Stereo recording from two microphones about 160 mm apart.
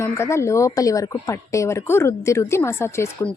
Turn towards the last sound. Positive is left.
turn(degrees=15)  # may be behind; listen again after turning